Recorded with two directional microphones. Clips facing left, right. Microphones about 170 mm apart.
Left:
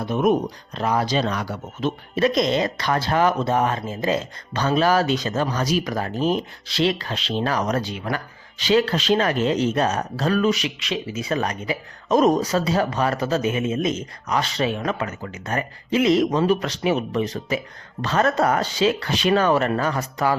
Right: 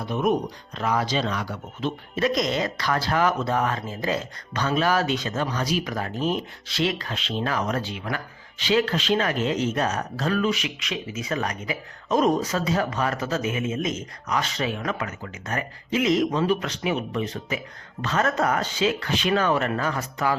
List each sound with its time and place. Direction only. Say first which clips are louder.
0.8 s speech: left 3 dB; 35° left (ahead or behind)